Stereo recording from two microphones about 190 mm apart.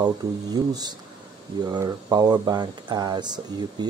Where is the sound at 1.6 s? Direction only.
20° right (ahead or behind).